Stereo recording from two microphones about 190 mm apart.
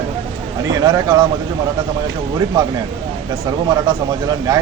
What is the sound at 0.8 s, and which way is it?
Speech, 20° right (ahead or behind).